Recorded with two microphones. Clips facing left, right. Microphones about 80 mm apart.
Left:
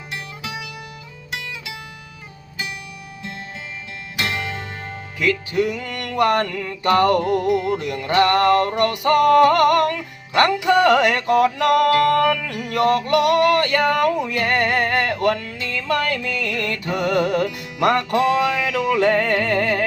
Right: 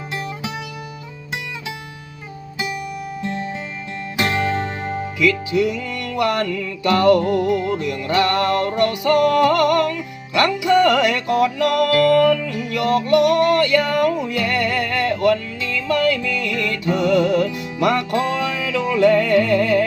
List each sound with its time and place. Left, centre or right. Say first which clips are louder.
4.2 s music: right 6 dB; right
5.2 s music: right 2 dB; left